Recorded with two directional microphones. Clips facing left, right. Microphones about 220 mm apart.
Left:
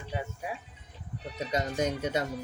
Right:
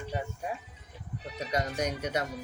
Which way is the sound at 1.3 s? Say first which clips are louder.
Left 1 dB; 25° left (ahead or behind).